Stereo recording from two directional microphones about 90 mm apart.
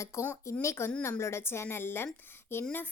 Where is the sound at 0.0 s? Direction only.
35° left (ahead or behind).